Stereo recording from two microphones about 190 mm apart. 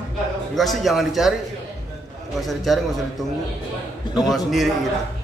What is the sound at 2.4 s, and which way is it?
Speech, centre (ahead or behind).